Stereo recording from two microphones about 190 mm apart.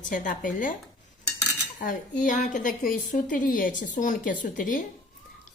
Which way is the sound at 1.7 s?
40° left (ahead or behind).